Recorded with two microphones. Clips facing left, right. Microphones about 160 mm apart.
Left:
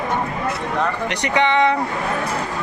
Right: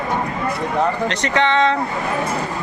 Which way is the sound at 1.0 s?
15° left (ahead or behind).